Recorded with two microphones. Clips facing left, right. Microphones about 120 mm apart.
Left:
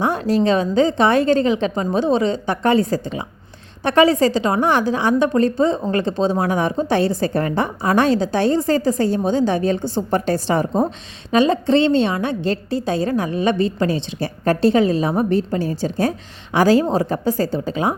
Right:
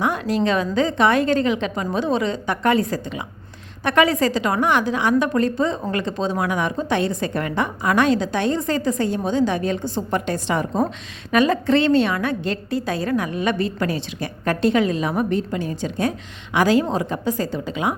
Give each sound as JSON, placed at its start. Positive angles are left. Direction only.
{"t": 0.0, "sound": "a woman's voice", "side_deg": 30}